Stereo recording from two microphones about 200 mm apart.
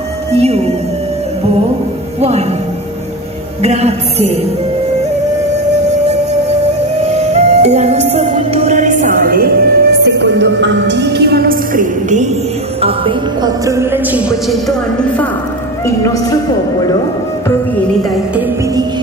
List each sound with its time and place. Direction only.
0.3 s a woman's voice: 30° right (ahead or behind)
2.1 s speech: 30° right (ahead or behind)
3.6 s a woman's voice: 35° right (ahead or behind)
7.1 s music: 30° right (ahead or behind)
12.8 s speech: 25° right (ahead or behind)
13.7 s speech: 10° right (ahead or behind)
14.5 s a woman's voice: centre (ahead or behind)
16.0 s speech: 15° left (ahead or behind)